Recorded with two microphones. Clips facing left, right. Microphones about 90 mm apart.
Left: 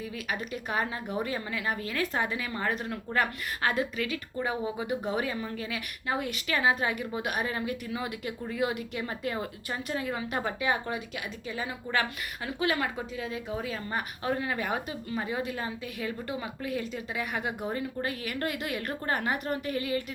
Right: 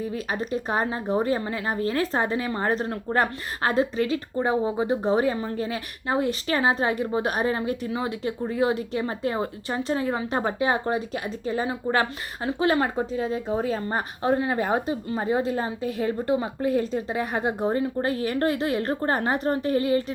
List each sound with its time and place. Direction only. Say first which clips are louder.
0.0 s a woman's voice: right 6 dB; 35° right (ahead or behind)